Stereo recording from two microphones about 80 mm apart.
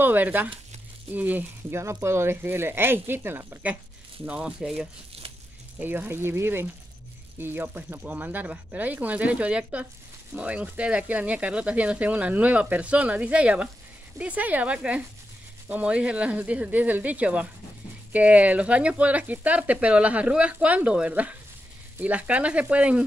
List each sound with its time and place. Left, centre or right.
0.0 s speech: right
1.8 s speech: right
4.3 s speech: centre
5.8 s speech: right